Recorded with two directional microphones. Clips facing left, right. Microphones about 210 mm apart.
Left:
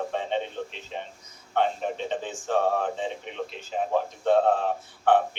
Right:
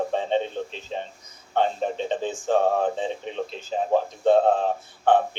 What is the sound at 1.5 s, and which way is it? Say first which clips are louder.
A man's voice: right 2 dB; 30° right (ahead or behind).